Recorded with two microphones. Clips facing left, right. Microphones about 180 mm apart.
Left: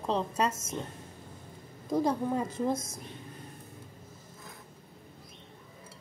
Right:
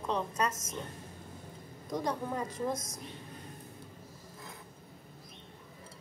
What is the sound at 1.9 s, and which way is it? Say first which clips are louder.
A woman's voice: left 6 dB; 30° left (ahead or behind).